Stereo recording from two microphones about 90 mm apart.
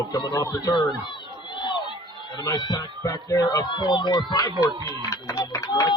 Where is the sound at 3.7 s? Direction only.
55° left (ahead or behind).